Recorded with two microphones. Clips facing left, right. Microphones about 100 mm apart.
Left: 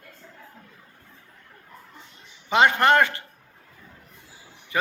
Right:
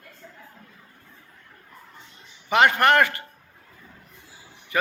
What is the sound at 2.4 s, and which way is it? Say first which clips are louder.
Speech: even; 20° left (ahead or behind).